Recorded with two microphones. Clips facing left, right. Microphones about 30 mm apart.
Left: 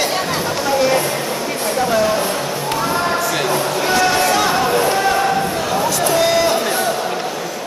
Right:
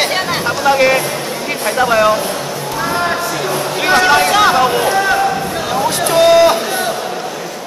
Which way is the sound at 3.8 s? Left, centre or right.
Right.